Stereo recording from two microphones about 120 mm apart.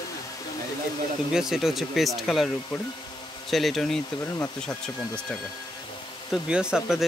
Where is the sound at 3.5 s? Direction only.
Centre (ahead or behind).